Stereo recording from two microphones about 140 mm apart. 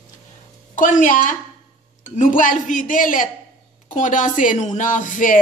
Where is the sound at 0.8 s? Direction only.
70° left (ahead or behind).